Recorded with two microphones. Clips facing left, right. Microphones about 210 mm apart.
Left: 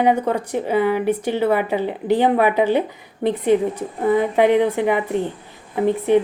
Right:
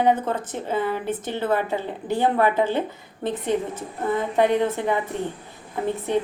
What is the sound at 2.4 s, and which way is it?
A woman's voice, 15° left (ahead or behind).